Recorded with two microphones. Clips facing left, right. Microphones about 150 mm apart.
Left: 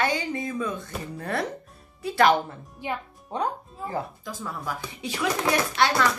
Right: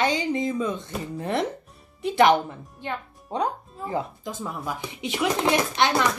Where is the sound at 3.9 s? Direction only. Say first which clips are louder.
Right 3 dB; 20° right (ahead or behind).